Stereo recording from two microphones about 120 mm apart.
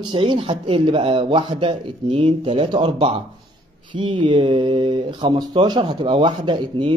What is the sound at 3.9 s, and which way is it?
Speech, 40° right (ahead or behind).